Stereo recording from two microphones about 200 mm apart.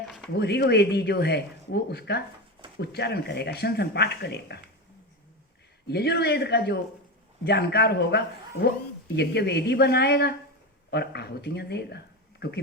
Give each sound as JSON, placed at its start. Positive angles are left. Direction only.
{"t": 0.3, "sound": "speech", "side_deg": 55}
{"t": 5.9, "sound": "speech", "side_deg": 55}